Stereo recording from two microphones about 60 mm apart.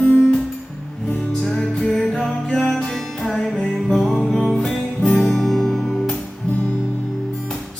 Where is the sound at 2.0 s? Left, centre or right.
Centre.